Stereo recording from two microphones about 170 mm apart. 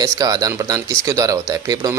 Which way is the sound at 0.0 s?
20° right (ahead or behind).